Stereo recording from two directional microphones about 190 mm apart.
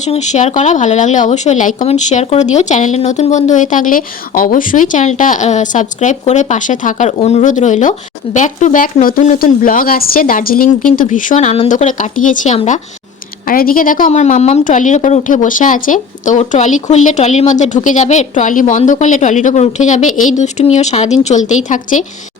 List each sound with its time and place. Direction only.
0.0 s a woman's voice: 35° left (ahead or behind)